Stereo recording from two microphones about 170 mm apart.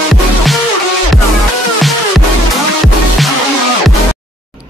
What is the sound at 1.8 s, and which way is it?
Music, centre (ahead or behind).